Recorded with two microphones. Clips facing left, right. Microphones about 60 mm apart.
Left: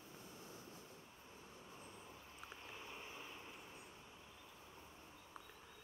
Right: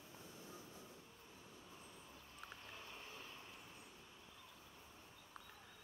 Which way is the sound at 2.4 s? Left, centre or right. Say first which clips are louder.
Left 1 dB; centre.